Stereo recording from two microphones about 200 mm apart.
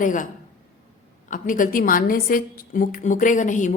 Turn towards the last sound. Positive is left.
turn(degrees=40)  # may be behind; listen again after turning